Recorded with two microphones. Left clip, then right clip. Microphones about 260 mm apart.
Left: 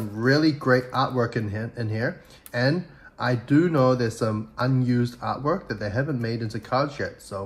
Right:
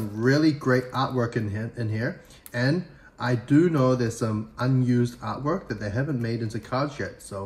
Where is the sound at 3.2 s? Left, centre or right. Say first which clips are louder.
Even; centre.